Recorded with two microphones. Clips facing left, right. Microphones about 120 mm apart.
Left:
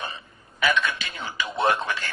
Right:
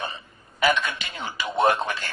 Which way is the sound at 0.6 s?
15° right (ahead or behind).